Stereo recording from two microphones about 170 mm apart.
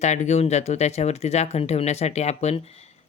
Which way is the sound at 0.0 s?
45° left (ahead or behind).